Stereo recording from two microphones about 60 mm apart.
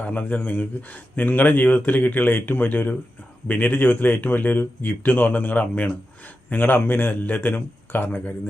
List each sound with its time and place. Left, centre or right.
0.0 s speech: left